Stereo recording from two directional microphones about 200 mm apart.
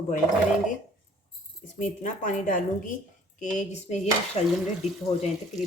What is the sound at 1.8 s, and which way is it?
Speech, 40° left (ahead or behind).